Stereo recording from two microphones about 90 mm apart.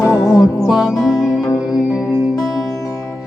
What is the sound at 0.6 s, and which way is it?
Music, 5° right (ahead or behind).